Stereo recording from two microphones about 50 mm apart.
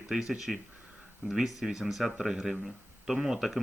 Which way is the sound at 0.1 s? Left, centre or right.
Centre.